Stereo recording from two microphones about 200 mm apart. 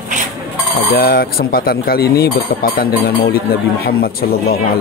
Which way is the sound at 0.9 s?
45° left (ahead or behind).